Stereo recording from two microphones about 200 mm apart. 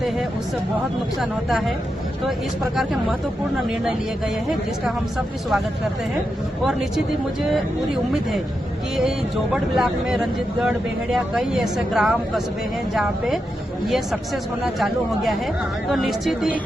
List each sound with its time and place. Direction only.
1.2 s speech: centre (ahead or behind)
2.7 s speech: centre (ahead or behind)
6.7 s speech: centre (ahead or behind)
9.0 s speech: centre (ahead or behind)